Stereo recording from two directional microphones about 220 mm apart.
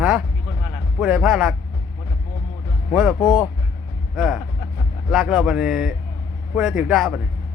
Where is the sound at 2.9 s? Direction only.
Centre (ahead or behind).